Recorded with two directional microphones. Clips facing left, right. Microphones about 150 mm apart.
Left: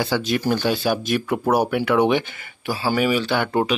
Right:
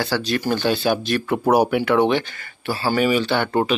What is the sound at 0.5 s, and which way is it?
Speech, 5° left (ahead or behind).